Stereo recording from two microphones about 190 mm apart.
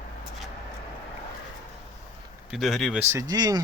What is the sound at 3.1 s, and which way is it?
Speech, 20° right (ahead or behind).